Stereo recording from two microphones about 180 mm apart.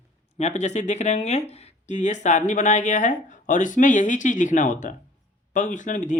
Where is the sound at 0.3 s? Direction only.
40° left (ahead or behind).